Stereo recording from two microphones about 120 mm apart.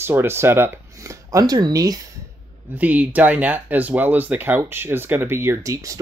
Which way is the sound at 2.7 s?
15° right (ahead or behind).